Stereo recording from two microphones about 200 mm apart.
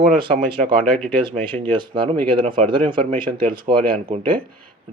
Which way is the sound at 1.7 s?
25° right (ahead or behind).